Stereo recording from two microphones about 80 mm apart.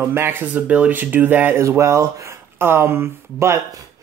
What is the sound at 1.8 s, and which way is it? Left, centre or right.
Speech, right.